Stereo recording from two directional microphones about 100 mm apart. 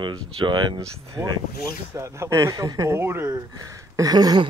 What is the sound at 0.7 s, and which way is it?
Speech, 35° right (ahead or behind).